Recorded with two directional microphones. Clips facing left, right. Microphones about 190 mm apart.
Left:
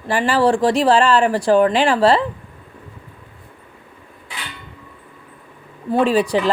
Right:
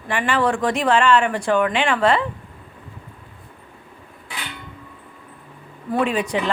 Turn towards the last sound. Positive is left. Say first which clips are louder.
# left 5 dB
turn(degrees=35)  # may be behind; listen again after turning